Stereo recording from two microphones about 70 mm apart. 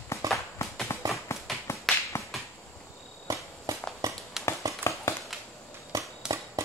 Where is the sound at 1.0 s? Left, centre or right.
Right.